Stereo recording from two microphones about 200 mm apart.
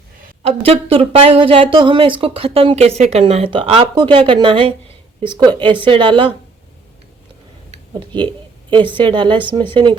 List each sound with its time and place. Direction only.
0.4 s speech: 30° right (ahead or behind)
7.7 s a sound: 25° right (ahead or behind)
8.7 s speech: 25° right (ahead or behind)